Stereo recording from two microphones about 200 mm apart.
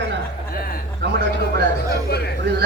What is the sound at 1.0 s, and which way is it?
Speech, 60° right (ahead or behind).